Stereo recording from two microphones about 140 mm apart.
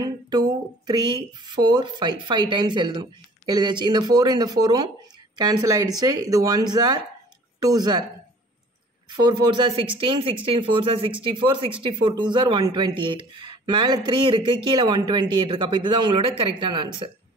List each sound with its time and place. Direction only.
0.0 s speech: 30° right (ahead or behind)
9.2 s speech: 35° right (ahead or behind)